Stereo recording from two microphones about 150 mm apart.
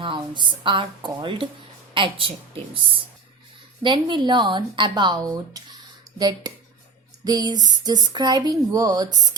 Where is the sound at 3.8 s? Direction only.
30° right (ahead or behind).